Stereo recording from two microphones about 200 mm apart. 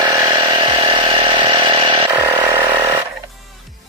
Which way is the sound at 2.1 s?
15° right (ahead or behind).